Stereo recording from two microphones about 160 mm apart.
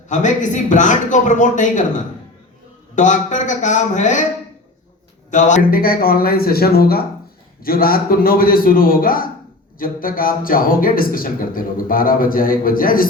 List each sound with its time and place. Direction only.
0.1 s a man's voice: 50° left (ahead or behind)
5.3 s a man's voice: 50° left (ahead or behind)